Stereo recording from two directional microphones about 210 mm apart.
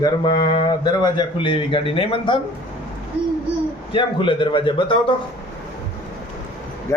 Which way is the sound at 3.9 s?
25° left (ahead or behind).